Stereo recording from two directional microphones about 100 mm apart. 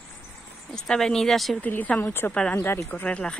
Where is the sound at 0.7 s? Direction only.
5° left (ahead or behind).